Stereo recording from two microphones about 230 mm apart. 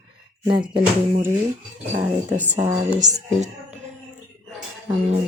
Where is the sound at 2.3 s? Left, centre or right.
Right.